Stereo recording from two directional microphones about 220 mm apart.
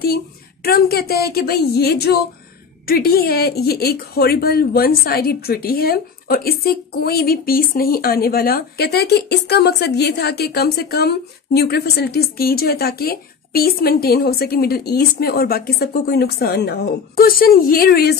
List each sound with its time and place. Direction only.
0.7 s a woman's voice: 45° left (ahead or behind)